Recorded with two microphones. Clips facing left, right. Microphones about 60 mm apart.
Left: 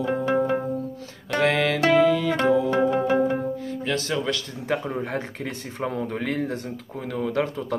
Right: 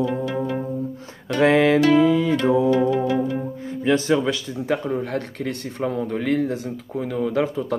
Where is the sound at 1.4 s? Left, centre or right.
Right.